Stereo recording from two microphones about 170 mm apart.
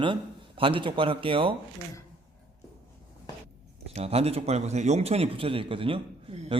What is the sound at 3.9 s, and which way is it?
A man's voice, 35° right (ahead or behind).